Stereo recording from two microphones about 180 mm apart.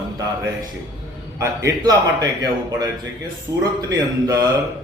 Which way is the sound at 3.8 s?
20° right (ahead or behind).